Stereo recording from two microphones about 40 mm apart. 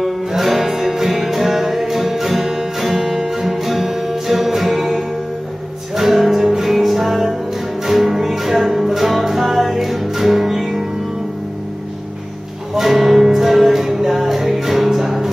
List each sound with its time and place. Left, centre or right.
0.3 s music: centre
12.7 s music: centre